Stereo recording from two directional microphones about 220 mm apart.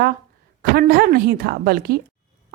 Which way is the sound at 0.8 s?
45° right (ahead or behind).